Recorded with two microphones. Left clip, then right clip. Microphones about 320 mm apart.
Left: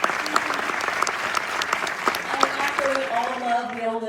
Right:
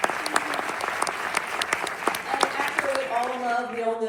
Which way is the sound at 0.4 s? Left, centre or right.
Right.